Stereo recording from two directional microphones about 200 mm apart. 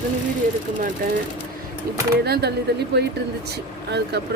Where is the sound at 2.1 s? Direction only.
55° right (ahead or behind).